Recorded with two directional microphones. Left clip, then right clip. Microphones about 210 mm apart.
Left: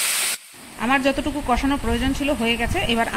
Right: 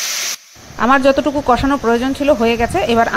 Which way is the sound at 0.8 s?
20° right (ahead or behind).